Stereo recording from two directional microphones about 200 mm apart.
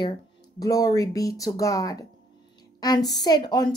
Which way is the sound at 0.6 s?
15° left (ahead or behind).